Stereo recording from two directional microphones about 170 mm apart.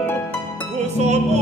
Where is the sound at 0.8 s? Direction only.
40° right (ahead or behind).